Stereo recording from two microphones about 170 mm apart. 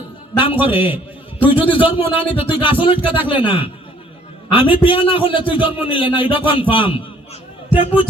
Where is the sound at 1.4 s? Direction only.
30° left (ahead or behind).